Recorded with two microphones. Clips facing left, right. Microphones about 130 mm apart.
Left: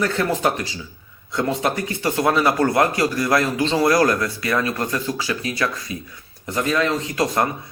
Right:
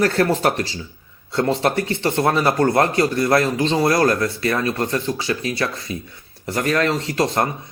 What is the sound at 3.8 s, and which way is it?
Speech, 30° right (ahead or behind).